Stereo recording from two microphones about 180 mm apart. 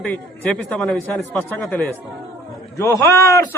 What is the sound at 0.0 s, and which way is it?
A man's voice, 5° left (ahead or behind).